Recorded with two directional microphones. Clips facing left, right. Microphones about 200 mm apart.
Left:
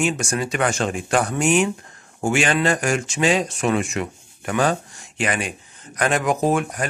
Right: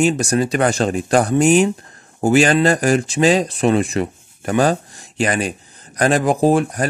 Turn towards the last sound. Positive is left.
turn(degrees=-35)  # may be behind; listen again after turning